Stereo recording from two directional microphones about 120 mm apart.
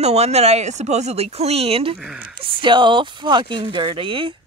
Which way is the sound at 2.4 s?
40° right (ahead or behind).